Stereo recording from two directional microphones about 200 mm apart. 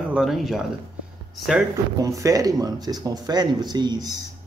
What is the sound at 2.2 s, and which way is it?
Speech, 15° right (ahead or behind).